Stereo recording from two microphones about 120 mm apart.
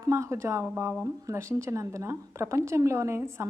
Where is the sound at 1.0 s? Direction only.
25° right (ahead or behind).